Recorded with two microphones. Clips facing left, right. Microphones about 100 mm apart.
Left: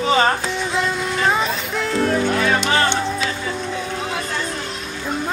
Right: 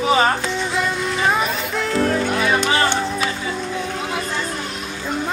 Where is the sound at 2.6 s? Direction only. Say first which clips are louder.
Even; 45° right (ahead or behind).